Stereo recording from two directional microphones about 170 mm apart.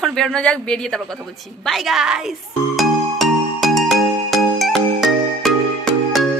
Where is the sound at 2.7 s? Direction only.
Centre (ahead or behind).